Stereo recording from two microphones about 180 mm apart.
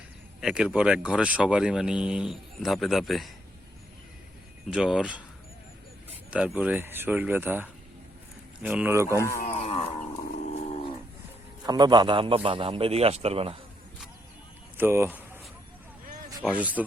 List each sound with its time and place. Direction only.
0.4 s speech: 5° right (ahead or behind)
4.7 s speech: 5° right (ahead or behind)
9.1 s speech: 15° left (ahead or behind)
9.4 s livestock: 35° left (ahead or behind)
10.3 s a sound: 50° left (ahead or behind)
11.6 s a man's voice: 25° right (ahead or behind)
14.8 s speech: 15° right (ahead or behind)
16.5 s speech: 10° right (ahead or behind)